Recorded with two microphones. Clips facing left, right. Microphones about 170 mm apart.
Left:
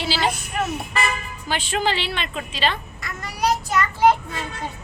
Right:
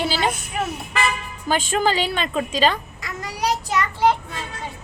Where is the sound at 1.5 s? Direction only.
45° right (ahead or behind).